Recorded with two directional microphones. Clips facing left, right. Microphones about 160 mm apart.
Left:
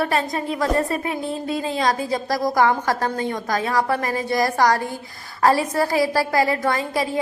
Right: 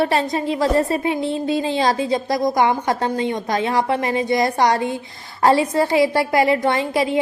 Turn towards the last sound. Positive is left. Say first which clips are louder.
# right 4 dB
turn(degrees=-25)  # may be behind; listen again after turning